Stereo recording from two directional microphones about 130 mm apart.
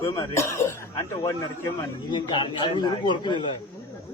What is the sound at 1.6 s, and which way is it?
A man's voice, 35° left (ahead or behind).